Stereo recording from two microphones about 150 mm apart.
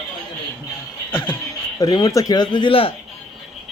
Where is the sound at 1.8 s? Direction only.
25° left (ahead or behind).